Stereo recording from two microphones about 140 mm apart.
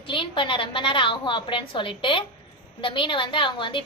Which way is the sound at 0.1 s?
35° left (ahead or behind).